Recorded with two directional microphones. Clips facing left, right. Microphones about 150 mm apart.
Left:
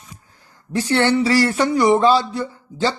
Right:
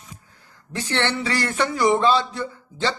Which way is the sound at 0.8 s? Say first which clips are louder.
Left 8 dB; 35° left (ahead or behind).